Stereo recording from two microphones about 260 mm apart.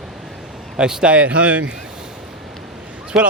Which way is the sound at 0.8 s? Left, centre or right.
Centre.